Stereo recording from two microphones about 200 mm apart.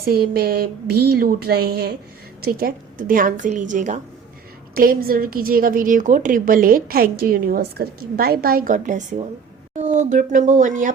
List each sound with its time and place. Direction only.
0.0 s a woman's voice: 50° right (ahead or behind)